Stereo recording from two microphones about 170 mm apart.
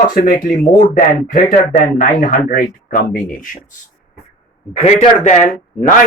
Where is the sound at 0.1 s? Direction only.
55° left (ahead or behind).